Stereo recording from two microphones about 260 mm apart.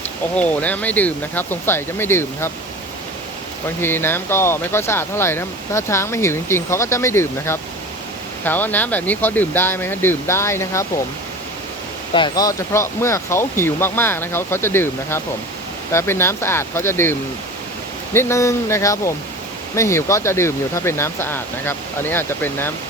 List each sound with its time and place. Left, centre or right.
0.3 s speech: centre
3.8 s speech: centre
12.1 s speech: centre